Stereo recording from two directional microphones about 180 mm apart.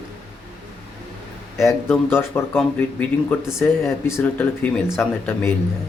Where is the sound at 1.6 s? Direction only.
15° left (ahead or behind).